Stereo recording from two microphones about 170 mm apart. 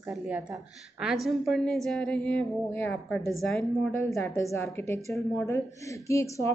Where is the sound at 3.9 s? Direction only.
15° left (ahead or behind).